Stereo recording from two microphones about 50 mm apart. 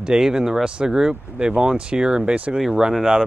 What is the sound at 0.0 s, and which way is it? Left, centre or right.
Speech, centre.